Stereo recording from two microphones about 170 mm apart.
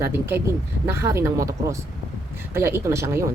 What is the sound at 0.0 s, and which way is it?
Speech, 15° right (ahead or behind).